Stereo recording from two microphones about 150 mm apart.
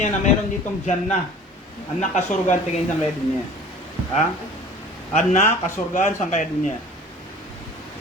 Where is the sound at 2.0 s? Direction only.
55° left (ahead or behind).